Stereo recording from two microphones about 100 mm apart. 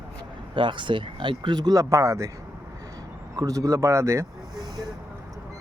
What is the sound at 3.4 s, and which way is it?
Speech, 35° right (ahead or behind).